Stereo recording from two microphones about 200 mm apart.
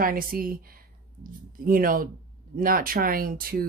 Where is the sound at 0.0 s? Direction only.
45° right (ahead or behind).